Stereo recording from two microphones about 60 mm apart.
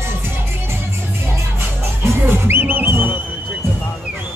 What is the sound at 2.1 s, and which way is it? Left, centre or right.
Music, right.